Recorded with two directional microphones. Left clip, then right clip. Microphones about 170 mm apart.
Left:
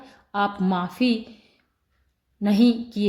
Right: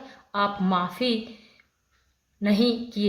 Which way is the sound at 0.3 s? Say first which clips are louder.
Even; 40° left (ahead or behind).